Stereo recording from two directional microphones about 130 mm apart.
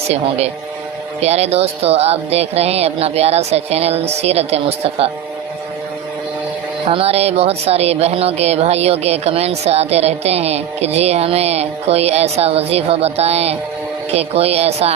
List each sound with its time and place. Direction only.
0.1 s speech: 50° right (ahead or behind)
6.8 s speech: 50° right (ahead or behind)